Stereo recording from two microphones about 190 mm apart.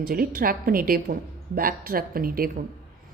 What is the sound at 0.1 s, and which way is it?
A woman's voice, 50° right (ahead or behind).